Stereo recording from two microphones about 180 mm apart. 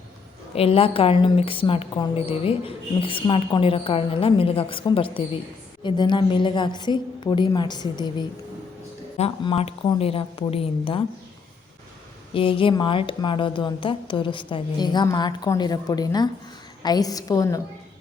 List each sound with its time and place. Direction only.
0.5 s a woman's voice: 35° left (ahead or behind)
9.1 s a woman's voice: 30° left (ahead or behind)
12.3 s a woman's voice: 30° left (ahead or behind)